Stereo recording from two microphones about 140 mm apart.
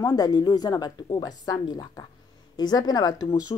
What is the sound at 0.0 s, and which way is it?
Speech, 20° left (ahead or behind).